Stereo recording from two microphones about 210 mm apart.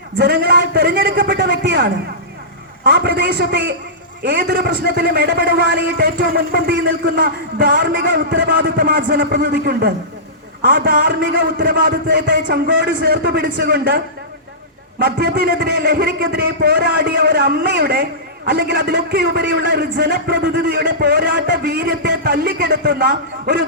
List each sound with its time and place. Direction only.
0.2 s a man's voice: 50° right (ahead or behind)